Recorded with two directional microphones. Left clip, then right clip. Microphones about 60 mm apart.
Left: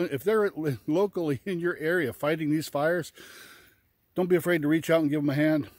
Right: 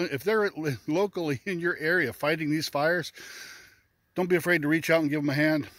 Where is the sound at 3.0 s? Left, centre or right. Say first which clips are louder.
Right 3 dB; left.